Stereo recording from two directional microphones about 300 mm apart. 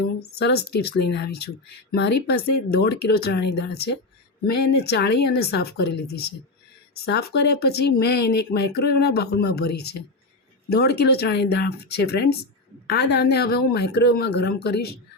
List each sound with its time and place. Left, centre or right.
0.3 s speech: left